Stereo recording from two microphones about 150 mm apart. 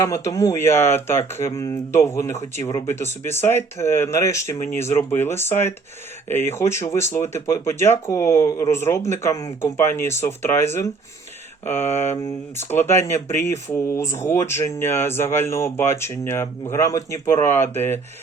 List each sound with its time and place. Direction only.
0.0 s speech: 20° left (ahead or behind)